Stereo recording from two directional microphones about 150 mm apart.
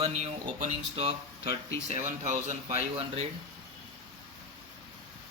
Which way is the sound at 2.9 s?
45° right (ahead or behind).